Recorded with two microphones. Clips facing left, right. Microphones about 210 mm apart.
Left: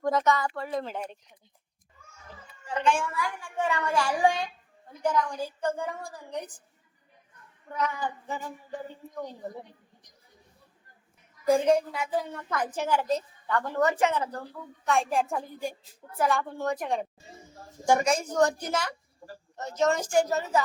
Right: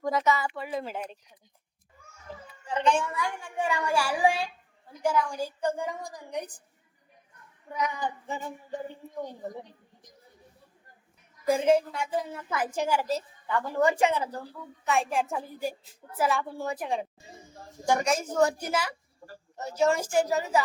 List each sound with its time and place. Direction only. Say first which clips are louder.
0.0 s speech: left 1 dB; centre (ahead or behind)
2.6 s female singing: right 1 dB; 20° right (ahead or behind)
3.6 s a woman's voice: even; 10° right (ahead or behind)
7.7 s female singing: even; 15° right (ahead or behind)
11.4 s a woman's voice: left 1 dB; 5° right (ahead or behind)